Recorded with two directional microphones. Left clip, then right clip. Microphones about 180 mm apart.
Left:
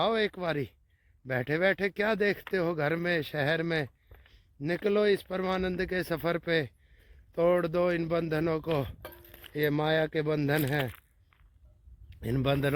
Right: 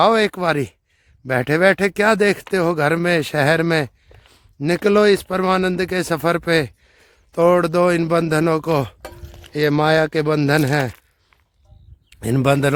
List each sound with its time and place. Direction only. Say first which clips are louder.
0.0 s speech: right 13 dB; 35° right (ahead or behind)
12.1 s a man's voice: right 12 dB; 30° right (ahead or behind)